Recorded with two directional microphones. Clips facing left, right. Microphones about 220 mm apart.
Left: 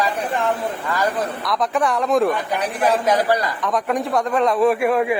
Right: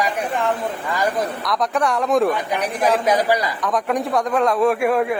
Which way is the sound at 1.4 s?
Centre (ahead or behind).